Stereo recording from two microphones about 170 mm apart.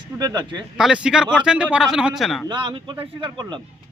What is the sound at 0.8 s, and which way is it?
Speech, 5° right (ahead or behind).